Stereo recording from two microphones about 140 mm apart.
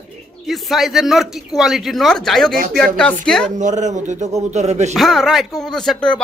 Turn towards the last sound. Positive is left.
turn(degrees=5)  # may be behind; listen again after turning